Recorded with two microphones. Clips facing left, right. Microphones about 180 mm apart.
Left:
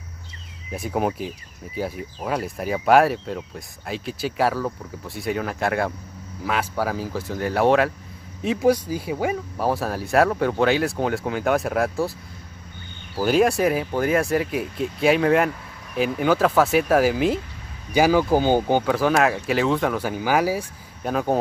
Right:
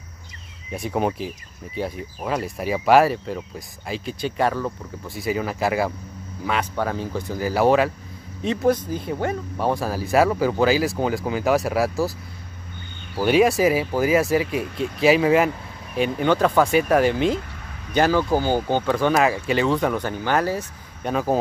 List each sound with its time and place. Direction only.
0.7 s speech: centre (ahead or behind)
13.2 s speech: centre (ahead or behind); by 18.9 s 15° left (ahead or behind)
18.9 s speech: centre (ahead or behind)